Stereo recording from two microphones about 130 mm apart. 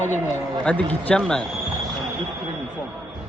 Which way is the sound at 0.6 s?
10° left (ahead or behind).